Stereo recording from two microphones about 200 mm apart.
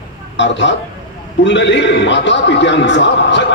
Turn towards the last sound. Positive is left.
turn(degrees=60)  # may be behind; listen again after turning